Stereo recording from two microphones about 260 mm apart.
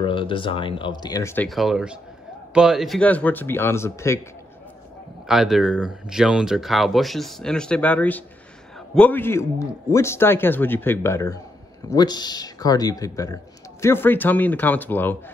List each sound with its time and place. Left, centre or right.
0.0 s speech: centre
5.2 s speech: centre